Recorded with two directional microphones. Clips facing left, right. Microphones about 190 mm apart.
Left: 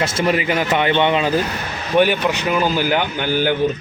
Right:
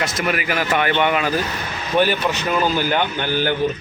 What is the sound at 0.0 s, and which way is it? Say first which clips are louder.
A man's voice: left 4 dB; 30° left (ahead or behind).